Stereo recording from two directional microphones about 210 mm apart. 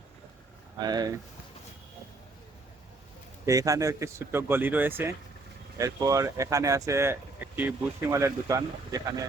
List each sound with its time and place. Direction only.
0.8 s speech: 20° right (ahead or behind)
3.4 s speech: 15° right (ahead or behind)